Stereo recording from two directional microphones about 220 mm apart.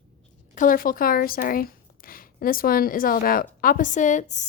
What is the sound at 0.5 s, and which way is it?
A woman's voice, 40° left (ahead or behind).